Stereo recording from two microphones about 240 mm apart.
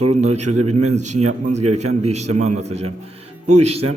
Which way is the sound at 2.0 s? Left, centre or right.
Right.